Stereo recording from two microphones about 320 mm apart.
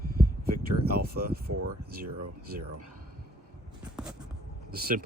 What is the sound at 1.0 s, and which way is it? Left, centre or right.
Speech, right.